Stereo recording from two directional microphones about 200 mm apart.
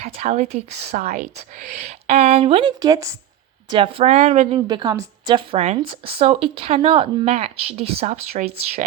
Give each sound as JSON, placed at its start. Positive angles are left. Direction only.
{"t": 0.0, "sound": "speech", "side_deg": -35}
{"t": 4.7, "sound": "speech", "side_deg": -20}